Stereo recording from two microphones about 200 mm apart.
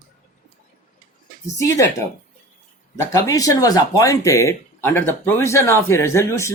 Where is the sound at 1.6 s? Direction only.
15° left (ahead or behind).